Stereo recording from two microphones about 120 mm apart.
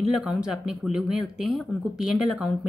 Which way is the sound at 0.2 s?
5° right (ahead or behind).